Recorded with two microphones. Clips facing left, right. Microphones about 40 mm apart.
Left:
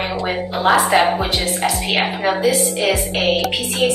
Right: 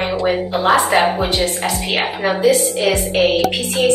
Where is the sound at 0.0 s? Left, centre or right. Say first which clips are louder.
Right 4 dB; centre.